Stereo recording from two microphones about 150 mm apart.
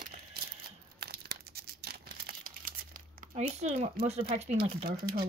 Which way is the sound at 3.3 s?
45° right (ahead or behind).